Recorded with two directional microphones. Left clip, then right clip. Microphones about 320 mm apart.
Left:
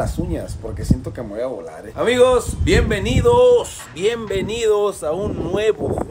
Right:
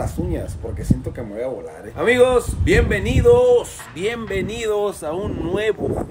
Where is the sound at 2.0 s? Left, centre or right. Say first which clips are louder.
Left 1 dB; centre.